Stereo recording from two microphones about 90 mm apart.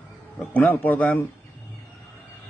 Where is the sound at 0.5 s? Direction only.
20° left (ahead or behind).